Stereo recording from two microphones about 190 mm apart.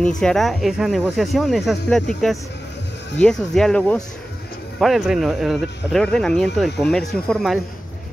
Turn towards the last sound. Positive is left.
turn(degrees=0)  # may be behind; listen again after turning